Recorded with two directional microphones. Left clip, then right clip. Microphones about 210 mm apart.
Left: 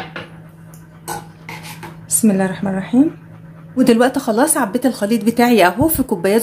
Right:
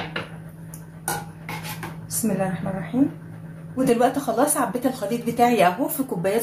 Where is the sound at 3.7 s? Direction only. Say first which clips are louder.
Left 6 dB; 40° left (ahead or behind).